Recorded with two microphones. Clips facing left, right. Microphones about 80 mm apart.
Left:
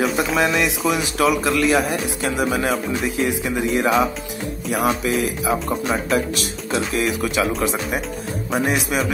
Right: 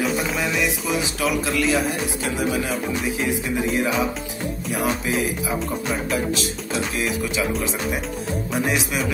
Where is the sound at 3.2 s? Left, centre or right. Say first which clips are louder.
Left 2 dB; left.